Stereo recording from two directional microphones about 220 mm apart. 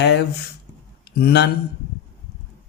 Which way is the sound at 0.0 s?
50° left (ahead or behind).